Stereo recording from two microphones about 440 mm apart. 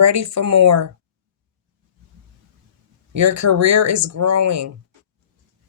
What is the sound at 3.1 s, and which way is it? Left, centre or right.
Speech, right.